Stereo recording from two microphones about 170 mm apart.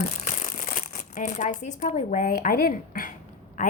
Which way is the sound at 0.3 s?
50° left (ahead or behind).